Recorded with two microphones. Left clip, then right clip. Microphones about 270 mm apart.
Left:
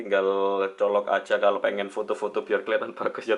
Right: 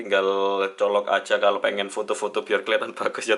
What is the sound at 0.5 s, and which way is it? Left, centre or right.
Speech, centre.